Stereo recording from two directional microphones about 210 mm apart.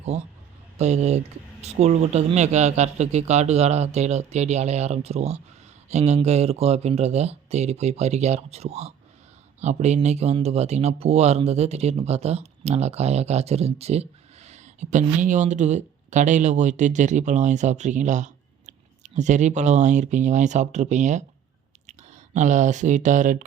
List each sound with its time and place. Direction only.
0.8 s speech: 30° right (ahead or behind)